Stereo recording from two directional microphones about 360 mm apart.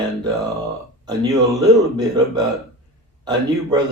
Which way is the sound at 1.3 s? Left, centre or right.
Centre.